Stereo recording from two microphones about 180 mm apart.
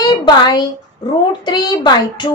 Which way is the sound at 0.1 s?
25° left (ahead or behind).